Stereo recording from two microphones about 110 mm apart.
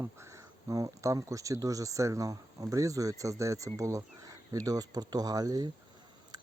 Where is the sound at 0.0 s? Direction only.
25° right (ahead or behind).